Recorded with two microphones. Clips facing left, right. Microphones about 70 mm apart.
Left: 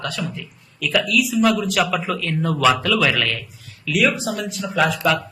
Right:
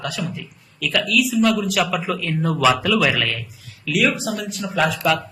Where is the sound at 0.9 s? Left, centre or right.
Centre.